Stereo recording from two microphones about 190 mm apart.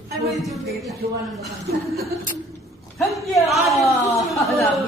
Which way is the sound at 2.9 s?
Centre (ahead or behind).